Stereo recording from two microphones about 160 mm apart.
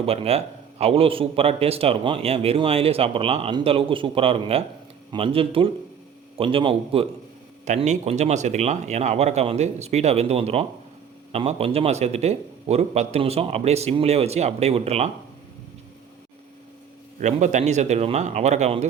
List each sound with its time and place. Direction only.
0.0 s a man's voice: 40° right (ahead or behind)
17.2 s speech: 50° right (ahead or behind)